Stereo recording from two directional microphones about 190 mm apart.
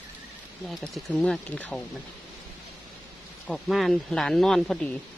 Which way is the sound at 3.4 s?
Centre (ahead or behind).